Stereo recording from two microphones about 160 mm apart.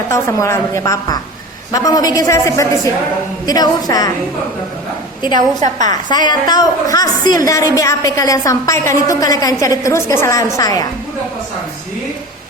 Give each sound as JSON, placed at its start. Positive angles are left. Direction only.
{"t": 0.1, "sound": "a woman's voice", "side_deg": 20}
{"t": 5.5, "sound": "a woman's voice", "side_deg": -50}
{"t": 5.9, "sound": "a woman's voice", "side_deg": 25}